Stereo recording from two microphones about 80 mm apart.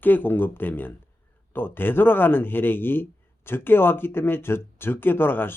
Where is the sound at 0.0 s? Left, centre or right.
Left.